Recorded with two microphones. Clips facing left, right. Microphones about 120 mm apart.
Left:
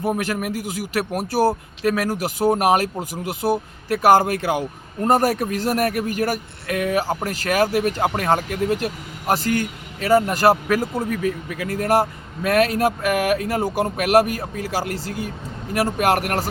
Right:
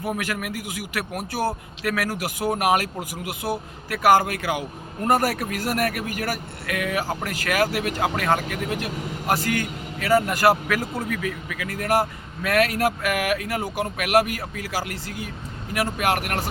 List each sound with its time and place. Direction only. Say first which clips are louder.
0.4 s a man's voice: left 5 dB; 30° left (ahead or behind)